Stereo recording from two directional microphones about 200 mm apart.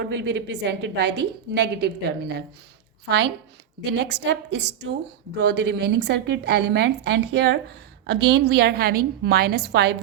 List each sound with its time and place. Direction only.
0.0 s a woman's voice: 60° right (ahead or behind)
3.8 s a woman's voice: 60° right (ahead or behind)